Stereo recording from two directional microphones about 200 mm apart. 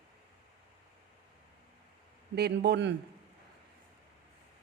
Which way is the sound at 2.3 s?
55° right (ahead or behind).